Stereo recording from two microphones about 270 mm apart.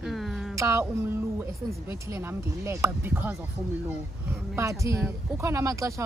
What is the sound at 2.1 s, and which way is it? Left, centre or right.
Speech, centre.